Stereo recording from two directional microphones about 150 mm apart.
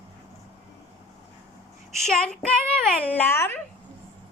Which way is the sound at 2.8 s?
10° left (ahead or behind).